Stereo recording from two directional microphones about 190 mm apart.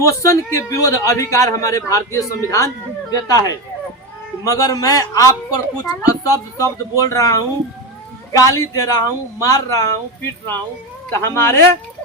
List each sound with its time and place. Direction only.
0.0 s a man's voice: 15° left (ahead or behind)